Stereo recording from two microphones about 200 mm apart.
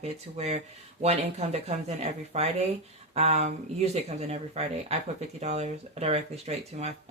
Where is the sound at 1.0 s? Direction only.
35° right (ahead or behind).